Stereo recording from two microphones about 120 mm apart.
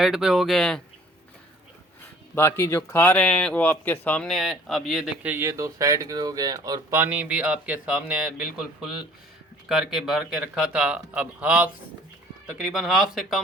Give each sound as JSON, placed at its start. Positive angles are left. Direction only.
{"t": 0.0, "sound": "speech", "side_deg": 0}
{"t": 2.3, "sound": "speech", "side_deg": 20}
{"t": 3.2, "sound": "speech", "side_deg": 10}
{"t": 5.2, "sound": "speech", "side_deg": -15}
{"t": 5.5, "sound": "speech", "side_deg": -30}
{"t": 6.9, "sound": "speech", "side_deg": -15}